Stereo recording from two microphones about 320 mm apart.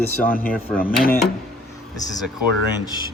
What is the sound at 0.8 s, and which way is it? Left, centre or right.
Speech, left.